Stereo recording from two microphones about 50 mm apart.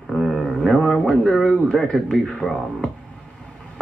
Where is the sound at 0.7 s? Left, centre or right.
Centre.